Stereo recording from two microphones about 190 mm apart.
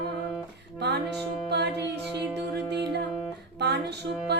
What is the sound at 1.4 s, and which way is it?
Music, 60° right (ahead or behind).